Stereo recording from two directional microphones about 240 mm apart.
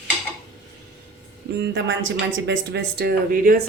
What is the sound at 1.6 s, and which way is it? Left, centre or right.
Speech, right.